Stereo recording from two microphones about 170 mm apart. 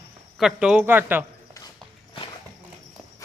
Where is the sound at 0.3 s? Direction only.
5° right (ahead or behind).